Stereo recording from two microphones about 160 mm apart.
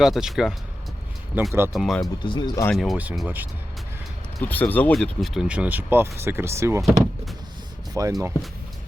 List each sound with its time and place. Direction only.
0.0 s speech: centre (ahead or behind)
1.7 s speech: centre (ahead or behind)
2.2 s speech: 30° left (ahead or behind)
2.7 s speech: centre (ahead or behind)
4.4 s speech: 10° left (ahead or behind); by 8.1 s 20° right (ahead or behind)